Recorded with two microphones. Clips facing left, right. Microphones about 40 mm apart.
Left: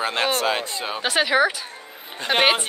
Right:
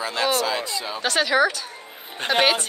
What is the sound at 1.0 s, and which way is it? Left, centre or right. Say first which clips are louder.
Speech: left 1 dB; centre.